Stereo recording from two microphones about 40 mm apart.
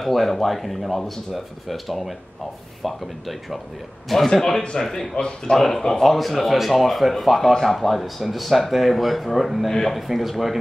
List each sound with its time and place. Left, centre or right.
0.0 s speech: centre
4.3 s a man's voice: centre
5.1 s speech: centre
5.6 s speech: centre
9.7 s a man's voice: centre
9.9 s speech: centre